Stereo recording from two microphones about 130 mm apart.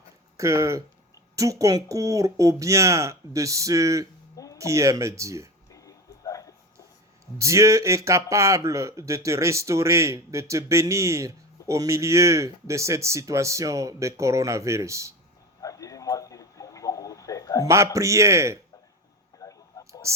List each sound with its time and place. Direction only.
0.3 s speech: 25° right (ahead or behind)
5.7 s a sound: 25° left (ahead or behind)
7.3 s speech: 25° right (ahead or behind)
15.6 s radio: 25° left (ahead or behind)
17.7 s speech: 25° right (ahead or behind)
19.4 s a sound: 25° left (ahead or behind)
19.8 s whispering: 25° left (ahead or behind)